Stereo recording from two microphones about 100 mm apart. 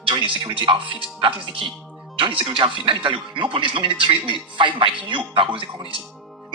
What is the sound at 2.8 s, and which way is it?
Speech, 60° right (ahead or behind).